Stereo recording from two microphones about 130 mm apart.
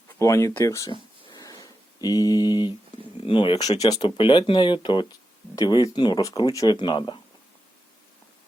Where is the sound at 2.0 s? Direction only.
30° left (ahead or behind).